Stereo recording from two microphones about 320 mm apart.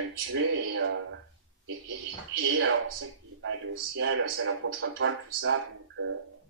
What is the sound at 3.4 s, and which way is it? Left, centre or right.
Speech, right.